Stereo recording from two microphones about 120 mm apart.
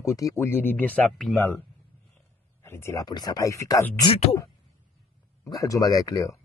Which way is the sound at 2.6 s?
20° left (ahead or behind).